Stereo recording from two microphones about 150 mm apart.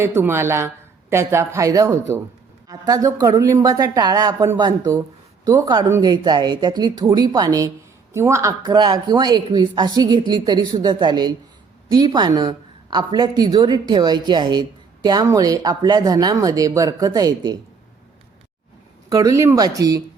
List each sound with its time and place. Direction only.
0.0 s speech: 15° right (ahead or behind)
19.0 s speech: 20° right (ahead or behind)